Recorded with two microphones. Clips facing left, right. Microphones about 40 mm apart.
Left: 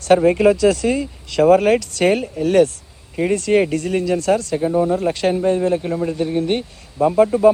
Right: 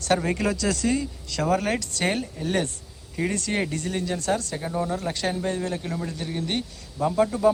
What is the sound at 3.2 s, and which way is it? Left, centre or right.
Speech, left.